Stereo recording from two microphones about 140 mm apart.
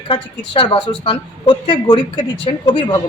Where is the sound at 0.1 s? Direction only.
35° left (ahead or behind).